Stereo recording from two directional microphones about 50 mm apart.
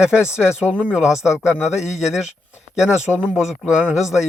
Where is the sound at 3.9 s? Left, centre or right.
Centre.